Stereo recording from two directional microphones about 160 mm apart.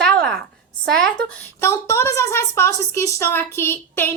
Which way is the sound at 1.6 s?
15° left (ahead or behind).